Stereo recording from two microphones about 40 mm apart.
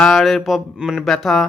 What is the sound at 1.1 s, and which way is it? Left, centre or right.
Speech, centre.